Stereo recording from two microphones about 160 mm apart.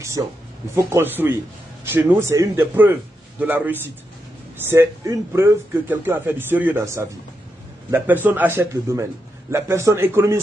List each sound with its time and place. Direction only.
0.0 s speech: 20° right (ahead or behind)